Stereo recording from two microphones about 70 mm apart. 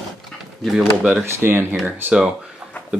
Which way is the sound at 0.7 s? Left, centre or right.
Centre.